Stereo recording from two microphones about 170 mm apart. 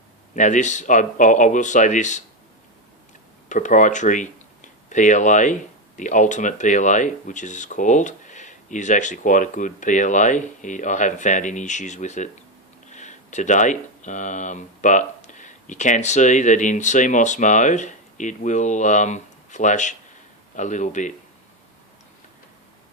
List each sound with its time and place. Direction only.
0.3 s speech: 45° left (ahead or behind)
3.5 s speech: 45° left (ahead or behind)